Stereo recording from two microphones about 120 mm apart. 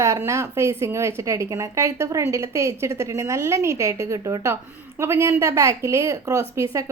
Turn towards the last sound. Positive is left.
turn(degrees=-25)  # may be behind; listen again after turning